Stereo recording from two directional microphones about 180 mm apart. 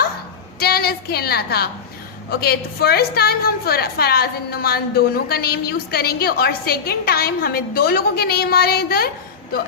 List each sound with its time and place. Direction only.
0.6 s a woman's voice: 60° left (ahead or behind)